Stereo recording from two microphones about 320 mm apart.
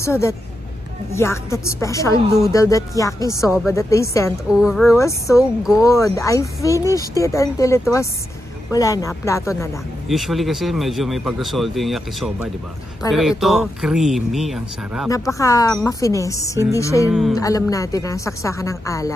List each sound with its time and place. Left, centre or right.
0.0 s speech: centre
4.5 s speech: centre
4.8 s speech: centre
15.0 s speech: centre
17.1 s speech: centre
17.4 s speech: centre